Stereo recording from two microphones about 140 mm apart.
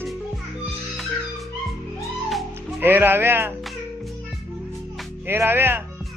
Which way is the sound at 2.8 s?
15° right (ahead or behind).